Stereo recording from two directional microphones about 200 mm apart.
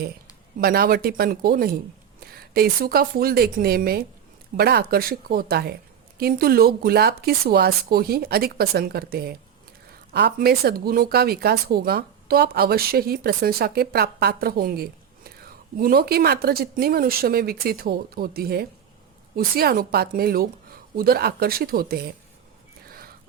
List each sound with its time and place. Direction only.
0.6 s speech: 50° right (ahead or behind)